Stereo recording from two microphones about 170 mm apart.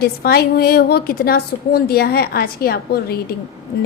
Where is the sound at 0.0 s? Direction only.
65° left (ahead or behind).